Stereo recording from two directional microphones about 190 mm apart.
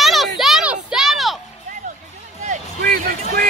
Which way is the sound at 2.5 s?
50° right (ahead or behind).